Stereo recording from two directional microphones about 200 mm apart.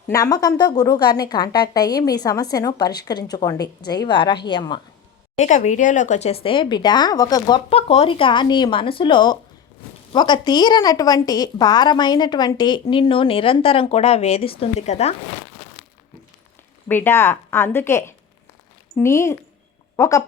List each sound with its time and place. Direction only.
0.1 s speech: 20° left (ahead or behind)
5.4 s speech: 40° left (ahead or behind)
16.9 s speech: 10° left (ahead or behind)